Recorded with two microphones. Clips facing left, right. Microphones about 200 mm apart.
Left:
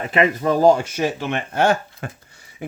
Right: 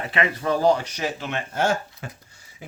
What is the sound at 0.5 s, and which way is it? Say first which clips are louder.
Speech: left 5 dB; 45° left (ahead or behind).